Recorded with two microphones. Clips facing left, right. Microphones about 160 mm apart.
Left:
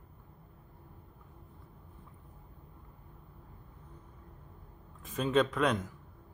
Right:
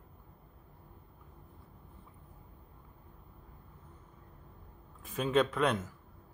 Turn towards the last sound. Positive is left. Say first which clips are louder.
# even
turn(degrees=-5)  # may be behind; listen again after turning